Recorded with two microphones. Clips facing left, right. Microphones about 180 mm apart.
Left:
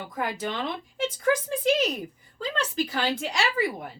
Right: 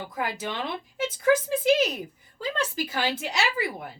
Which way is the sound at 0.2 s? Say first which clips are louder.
Left 1 dB; 5° right (ahead or behind).